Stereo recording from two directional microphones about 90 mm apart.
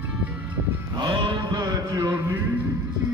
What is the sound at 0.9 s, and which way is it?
Mantra, 55° right (ahead or behind).